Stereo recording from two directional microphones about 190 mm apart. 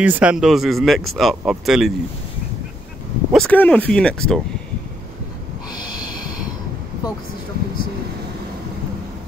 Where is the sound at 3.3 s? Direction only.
5° left (ahead or behind).